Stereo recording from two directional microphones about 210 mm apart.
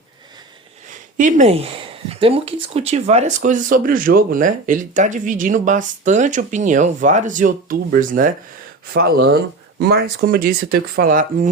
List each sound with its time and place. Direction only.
0.9 s speech: 35° right (ahead or behind)